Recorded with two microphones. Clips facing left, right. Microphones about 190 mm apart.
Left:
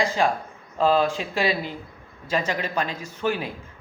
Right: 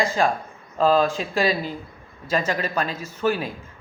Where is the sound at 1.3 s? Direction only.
40° right (ahead or behind).